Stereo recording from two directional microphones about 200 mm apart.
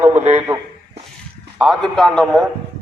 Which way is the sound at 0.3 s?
10° right (ahead or behind).